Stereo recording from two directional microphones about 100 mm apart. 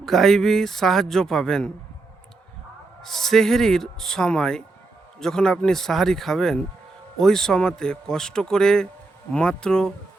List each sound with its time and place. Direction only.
0.0 s speech: centre (ahead or behind)
3.0 s a man's voice: 5° left (ahead or behind)